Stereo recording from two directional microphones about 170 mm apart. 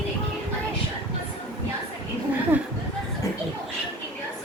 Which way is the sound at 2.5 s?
10° right (ahead or behind).